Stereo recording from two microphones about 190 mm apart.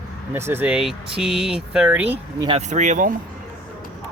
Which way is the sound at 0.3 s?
10° right (ahead or behind).